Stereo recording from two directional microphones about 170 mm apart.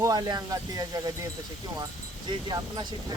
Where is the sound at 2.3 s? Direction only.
25° right (ahead or behind).